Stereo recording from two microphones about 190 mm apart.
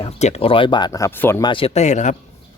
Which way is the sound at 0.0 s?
35° left (ahead or behind).